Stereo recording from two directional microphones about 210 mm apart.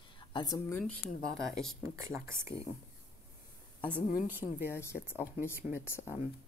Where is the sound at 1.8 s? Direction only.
10° right (ahead or behind).